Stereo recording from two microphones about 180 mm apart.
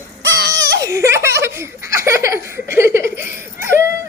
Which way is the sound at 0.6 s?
20° right (ahead or behind).